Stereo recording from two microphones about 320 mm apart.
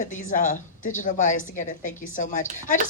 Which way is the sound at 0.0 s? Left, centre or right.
Left.